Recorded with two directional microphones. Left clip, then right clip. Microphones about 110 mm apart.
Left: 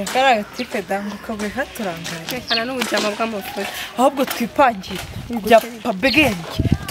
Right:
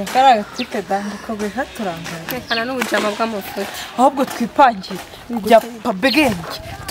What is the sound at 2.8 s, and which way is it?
Speech, 5° left (ahead or behind).